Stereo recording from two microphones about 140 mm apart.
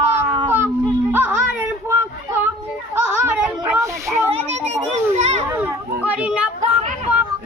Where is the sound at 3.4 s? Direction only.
15° right (ahead or behind).